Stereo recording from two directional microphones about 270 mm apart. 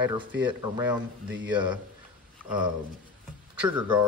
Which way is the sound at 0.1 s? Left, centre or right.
Centre.